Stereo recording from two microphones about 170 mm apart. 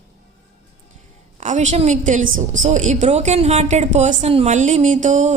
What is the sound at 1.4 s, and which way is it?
A woman's voice, 45° right (ahead or behind).